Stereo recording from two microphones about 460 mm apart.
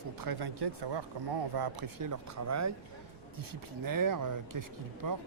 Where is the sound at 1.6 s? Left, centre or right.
Right.